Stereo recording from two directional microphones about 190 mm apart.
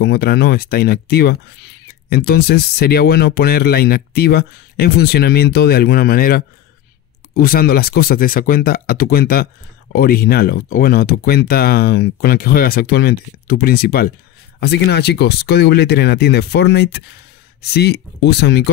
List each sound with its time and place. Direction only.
0.0 s speech: 55° left (ahead or behind)